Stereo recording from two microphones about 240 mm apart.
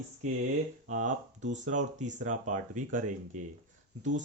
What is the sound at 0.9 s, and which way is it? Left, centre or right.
Speech, right.